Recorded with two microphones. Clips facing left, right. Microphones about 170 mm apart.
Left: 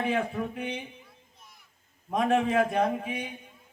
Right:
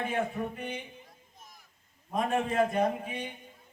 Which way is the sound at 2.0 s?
75° left (ahead or behind).